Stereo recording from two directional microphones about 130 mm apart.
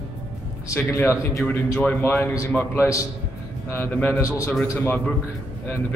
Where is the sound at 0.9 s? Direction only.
15° left (ahead or behind).